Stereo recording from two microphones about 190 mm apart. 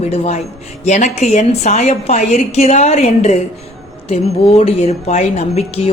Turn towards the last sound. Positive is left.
turn(degrees=35)  # may be behind; listen again after turning